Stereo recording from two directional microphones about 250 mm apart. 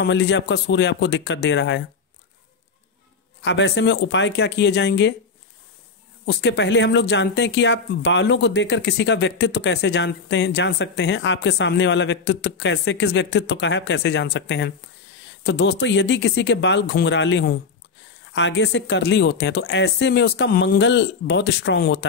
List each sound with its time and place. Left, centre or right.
0.0 s speech: left
3.4 s speech: left
6.2 s speech: left